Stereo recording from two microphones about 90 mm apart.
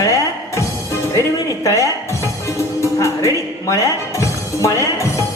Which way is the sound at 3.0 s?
35° left (ahead or behind).